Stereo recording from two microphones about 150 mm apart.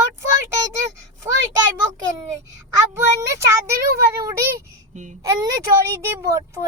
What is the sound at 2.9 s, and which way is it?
A child's voice, 20° right (ahead or behind).